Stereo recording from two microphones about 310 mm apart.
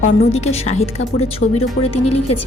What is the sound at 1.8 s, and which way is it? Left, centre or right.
Speech, left.